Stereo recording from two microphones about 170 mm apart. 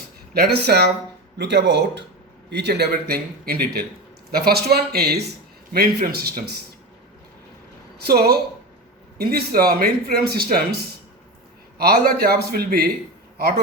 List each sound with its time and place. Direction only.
0.3 s a man's voice: 70° right (ahead or behind)
1.4 s speech: 90° right
2.5 s a man's voice: 80° right
8.0 s a man's voice: 65° right (ahead or behind)
11.8 s a man's voice: 65° right (ahead or behind)